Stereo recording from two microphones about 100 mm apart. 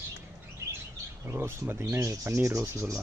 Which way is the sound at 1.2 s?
25° right (ahead or behind).